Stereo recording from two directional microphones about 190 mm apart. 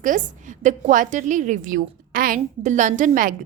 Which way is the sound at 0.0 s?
45° right (ahead or behind).